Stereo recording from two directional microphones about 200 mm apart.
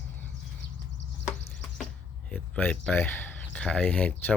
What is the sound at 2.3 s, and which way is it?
Speech, 5° left (ahead or behind).